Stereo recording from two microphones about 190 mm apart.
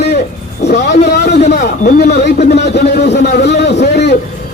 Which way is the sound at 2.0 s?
60° left (ahead or behind).